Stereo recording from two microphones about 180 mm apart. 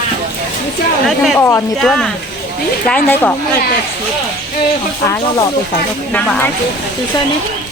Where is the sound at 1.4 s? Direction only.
15° left (ahead or behind).